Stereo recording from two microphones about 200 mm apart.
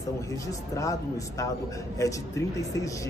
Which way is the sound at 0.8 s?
15° left (ahead or behind).